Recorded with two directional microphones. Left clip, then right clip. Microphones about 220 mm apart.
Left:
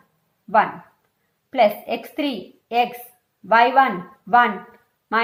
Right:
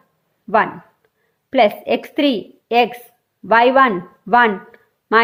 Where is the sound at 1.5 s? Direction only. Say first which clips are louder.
Right 4 dB; 45° right (ahead or behind).